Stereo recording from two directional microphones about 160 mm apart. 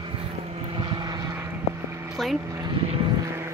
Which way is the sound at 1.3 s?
15° right (ahead or behind).